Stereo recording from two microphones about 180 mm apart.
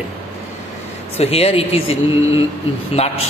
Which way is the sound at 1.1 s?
35° left (ahead or behind).